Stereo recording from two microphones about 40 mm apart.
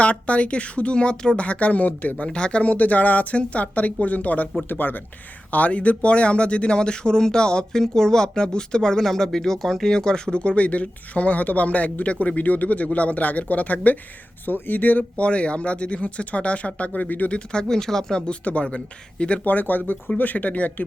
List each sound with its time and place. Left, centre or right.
0.0 s speech: left
1.4 s speech: left
2.2 s speech: left
12.1 s speech: left
12.4 s speech: left
15.1 s speech: left
17.3 s speech: left
18.4 s speech: left
19.5 s speech: left